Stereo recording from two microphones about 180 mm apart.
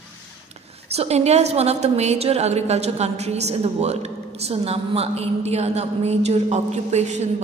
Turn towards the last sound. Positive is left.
turn(degrees=-40)  # may be behind; listen again after turning